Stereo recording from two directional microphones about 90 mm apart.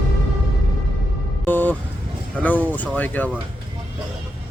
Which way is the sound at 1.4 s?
20° left (ahead or behind).